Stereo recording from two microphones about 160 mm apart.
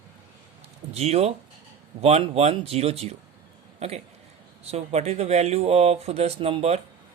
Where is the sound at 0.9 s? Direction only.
40° right (ahead or behind).